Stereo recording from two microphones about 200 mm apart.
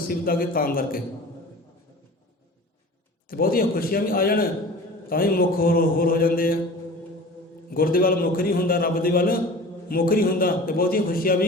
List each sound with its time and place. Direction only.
0.1 s a man's voice: 45° left (ahead or behind)
3.2 s a man's voice: 45° left (ahead or behind)
7.7 s a man's voice: 45° left (ahead or behind)